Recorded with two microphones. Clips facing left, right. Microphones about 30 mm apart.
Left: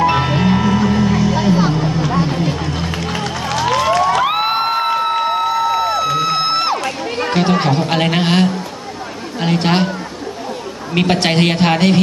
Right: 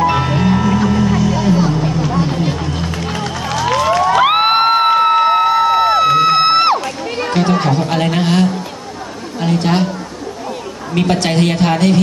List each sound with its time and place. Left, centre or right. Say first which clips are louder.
0.1 s music: even; centre
1.9 s a sound: even; centre
2.6 s run: even; centre
4.2 s music: right 5 dB; right
7.2 s a woman's voice: even; centre
11.0 s a woman's voice: even; left